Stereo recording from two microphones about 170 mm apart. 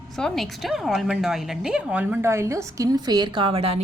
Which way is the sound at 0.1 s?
Centre (ahead or behind).